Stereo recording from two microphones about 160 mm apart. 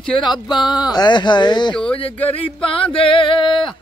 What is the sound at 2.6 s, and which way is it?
Male singing, 35° left (ahead or behind).